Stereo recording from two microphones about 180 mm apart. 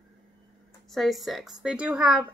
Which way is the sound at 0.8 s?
Centre (ahead or behind).